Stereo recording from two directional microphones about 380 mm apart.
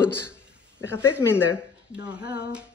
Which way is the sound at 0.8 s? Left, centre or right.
Centre.